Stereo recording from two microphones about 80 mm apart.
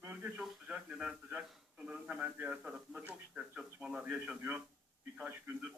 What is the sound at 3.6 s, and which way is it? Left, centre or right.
A man's voice, centre.